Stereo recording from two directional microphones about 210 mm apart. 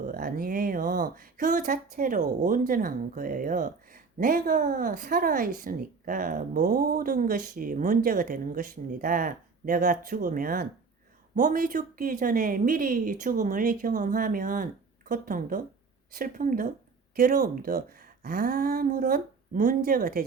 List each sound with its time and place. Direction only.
0.0 s speech: 40° right (ahead or behind)